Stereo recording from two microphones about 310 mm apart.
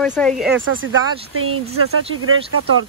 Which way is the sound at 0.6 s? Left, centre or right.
Right.